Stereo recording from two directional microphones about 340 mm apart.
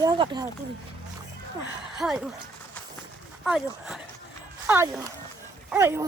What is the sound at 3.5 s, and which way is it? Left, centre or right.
Speech, centre.